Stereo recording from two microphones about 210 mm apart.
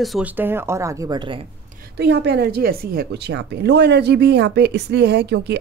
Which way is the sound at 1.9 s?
55° right (ahead or behind).